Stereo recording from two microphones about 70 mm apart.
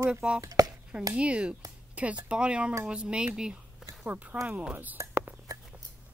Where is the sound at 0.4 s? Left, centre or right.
Right.